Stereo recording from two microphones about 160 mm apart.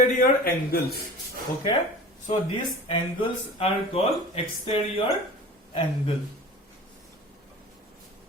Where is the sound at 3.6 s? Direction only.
40° left (ahead or behind).